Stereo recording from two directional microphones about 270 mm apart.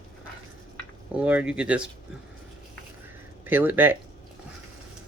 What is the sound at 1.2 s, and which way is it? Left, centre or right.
Speech, centre.